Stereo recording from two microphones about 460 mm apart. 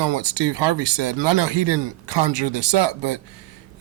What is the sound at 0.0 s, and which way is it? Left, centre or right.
Speech, right.